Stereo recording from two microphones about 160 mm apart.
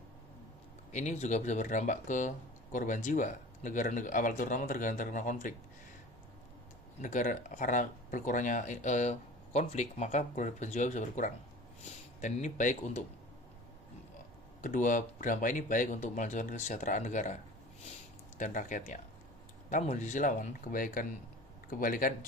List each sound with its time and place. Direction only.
0.9 s speech: 50° left (ahead or behind)
7.0 s speech: 55° left (ahead or behind)
14.6 s speech: 55° left (ahead or behind)
18.3 s speech: 50° left (ahead or behind)